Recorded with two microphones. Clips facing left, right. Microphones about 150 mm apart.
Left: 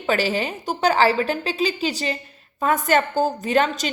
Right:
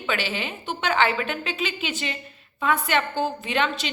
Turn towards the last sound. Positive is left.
turn(degrees=40)  # may be behind; listen again after turning